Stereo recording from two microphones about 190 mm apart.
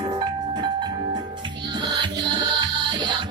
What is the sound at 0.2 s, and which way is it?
Music, 25° right (ahead or behind).